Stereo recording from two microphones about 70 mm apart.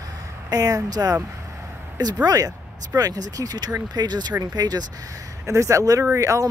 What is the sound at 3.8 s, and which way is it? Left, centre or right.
Speech, right.